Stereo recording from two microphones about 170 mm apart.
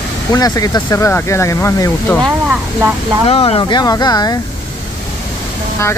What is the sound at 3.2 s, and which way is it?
Speech, 35° left (ahead or behind).